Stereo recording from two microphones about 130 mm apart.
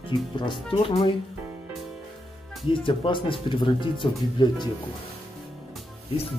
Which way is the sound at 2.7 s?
40° left (ahead or behind).